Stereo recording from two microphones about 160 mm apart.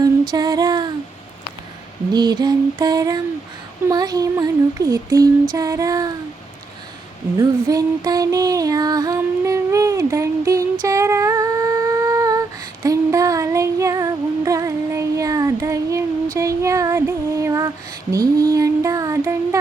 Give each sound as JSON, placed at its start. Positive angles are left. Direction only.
{"t": 0.0, "sound": "music", "side_deg": -25}
{"t": 2.1, "sound": "child singing", "side_deg": -25}
{"t": 7.3, "sound": "music", "side_deg": -20}
{"t": 10.8, "sound": "humming", "side_deg": -20}
{"t": 18.1, "sound": "child singing", "side_deg": -20}